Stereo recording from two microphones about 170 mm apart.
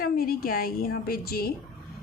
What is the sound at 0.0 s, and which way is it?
Speech, 60° left (ahead or behind).